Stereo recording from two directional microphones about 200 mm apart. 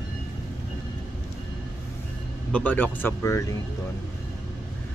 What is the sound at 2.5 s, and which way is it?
Speech, 10° left (ahead or behind).